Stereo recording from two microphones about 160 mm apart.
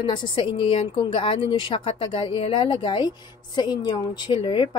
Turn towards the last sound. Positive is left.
turn(degrees=30)  # may be behind; listen again after turning